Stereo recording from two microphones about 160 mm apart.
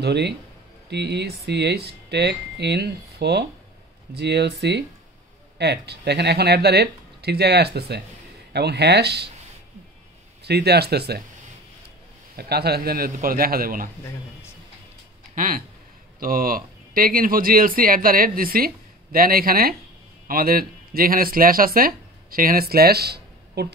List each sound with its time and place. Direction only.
0.0 s speech: 90° right
10.4 s speech: 90° right
12.4 s a man's voice: 80° right; by 13.8 s 65° right (ahead or behind)
15.3 s speech: 60° right (ahead or behind); by 23.7 s 85° right